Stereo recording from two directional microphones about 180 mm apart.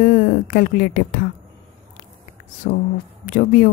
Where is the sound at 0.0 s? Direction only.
50° left (ahead or behind).